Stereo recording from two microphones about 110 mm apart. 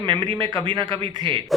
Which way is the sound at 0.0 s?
50° right (ahead or behind).